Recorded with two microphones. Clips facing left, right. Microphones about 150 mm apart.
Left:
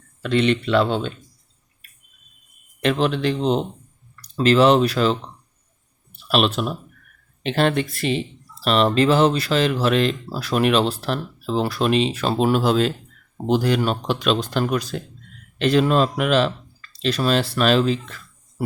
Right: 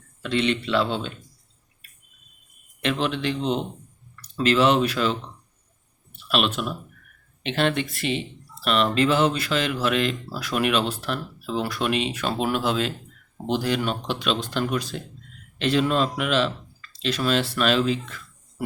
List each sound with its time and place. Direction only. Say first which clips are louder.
0.2 s speech: left 4 dB; 50° left (ahead or behind)
2.8 s speech: left 5 dB; 40° left (ahead or behind)
6.1 s speech: left 4 dB; 35° left (ahead or behind)